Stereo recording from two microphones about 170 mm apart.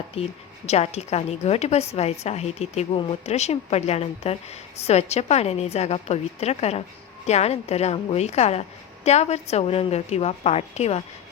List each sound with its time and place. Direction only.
0.1 s a woman's voice: 40° left (ahead or behind)